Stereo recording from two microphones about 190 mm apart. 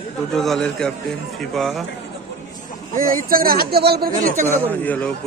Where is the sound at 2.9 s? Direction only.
45° right (ahead or behind).